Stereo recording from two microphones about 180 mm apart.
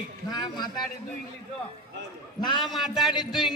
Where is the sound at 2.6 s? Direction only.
Centre (ahead or behind).